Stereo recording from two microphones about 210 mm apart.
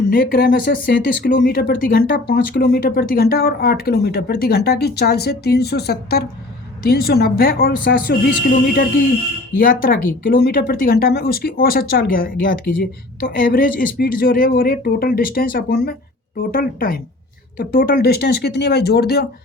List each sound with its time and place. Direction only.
0.1 s speech: 45° left (ahead or behind)